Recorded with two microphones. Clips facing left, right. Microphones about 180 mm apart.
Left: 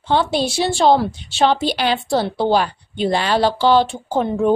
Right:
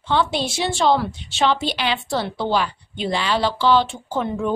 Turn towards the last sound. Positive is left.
turn(degrees=40)  # may be behind; listen again after turning